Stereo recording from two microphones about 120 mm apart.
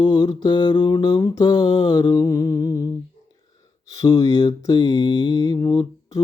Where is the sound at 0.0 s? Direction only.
35° left (ahead or behind).